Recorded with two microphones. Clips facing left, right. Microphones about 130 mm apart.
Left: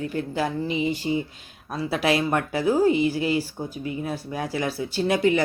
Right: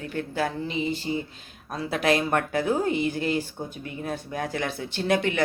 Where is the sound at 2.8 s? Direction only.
50° right (ahead or behind).